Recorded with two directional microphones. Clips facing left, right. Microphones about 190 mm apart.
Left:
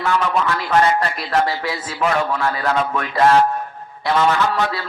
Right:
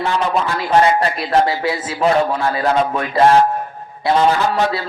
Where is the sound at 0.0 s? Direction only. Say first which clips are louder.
Right 1 dB; 30° right (ahead or behind).